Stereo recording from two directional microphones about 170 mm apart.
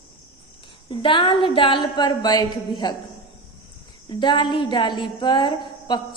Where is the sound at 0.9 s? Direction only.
30° left (ahead or behind).